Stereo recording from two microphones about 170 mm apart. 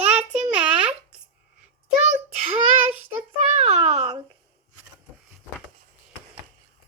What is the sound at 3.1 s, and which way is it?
A child's voice, 35° right (ahead or behind).